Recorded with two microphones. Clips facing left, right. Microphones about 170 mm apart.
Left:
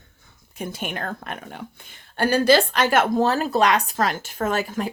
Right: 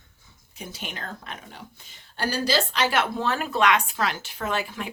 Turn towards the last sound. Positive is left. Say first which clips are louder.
# left 5 dB
turn(degrees=40)  # may be behind; listen again after turning